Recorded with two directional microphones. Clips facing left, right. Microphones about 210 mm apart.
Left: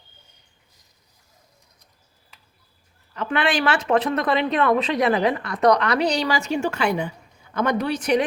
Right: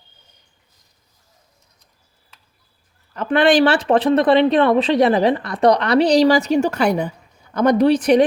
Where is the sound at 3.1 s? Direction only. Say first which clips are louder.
Right 8 dB; 40° right (ahead or behind).